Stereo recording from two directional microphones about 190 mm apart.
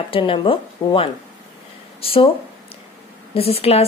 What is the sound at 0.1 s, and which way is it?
A woman's voice, 25° left (ahead or behind).